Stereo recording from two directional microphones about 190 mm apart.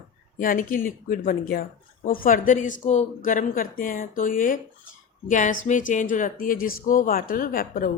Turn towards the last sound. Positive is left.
turn(degrees=50)  # may be behind; listen again after turning